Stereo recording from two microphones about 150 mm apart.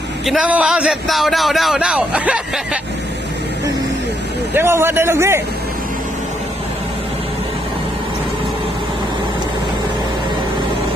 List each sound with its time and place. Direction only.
0.3 s a man's voice: 5° right (ahead or behind)
4.5 s a man's voice: 15° right (ahead or behind)